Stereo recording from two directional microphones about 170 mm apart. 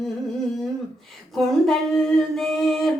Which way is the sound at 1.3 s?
Centre (ahead or behind).